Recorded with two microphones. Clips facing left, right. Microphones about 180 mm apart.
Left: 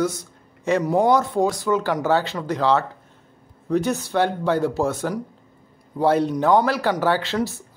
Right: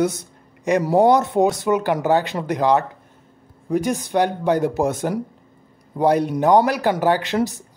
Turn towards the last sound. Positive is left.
turn(degrees=-15)  # may be behind; listen again after turning